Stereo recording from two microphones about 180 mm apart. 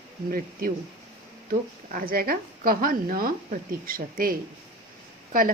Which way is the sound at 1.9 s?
55° right (ahead or behind).